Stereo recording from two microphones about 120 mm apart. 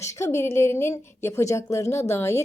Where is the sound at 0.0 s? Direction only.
25° left (ahead or behind).